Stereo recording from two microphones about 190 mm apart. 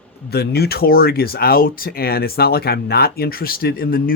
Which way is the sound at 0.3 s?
55° left (ahead or behind).